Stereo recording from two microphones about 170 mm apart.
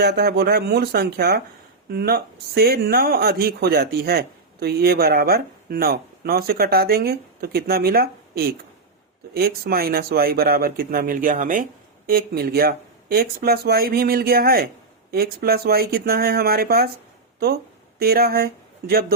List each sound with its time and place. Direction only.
0.0 s speech: 70° right (ahead or behind)
18.0 s speech: 65° right (ahead or behind)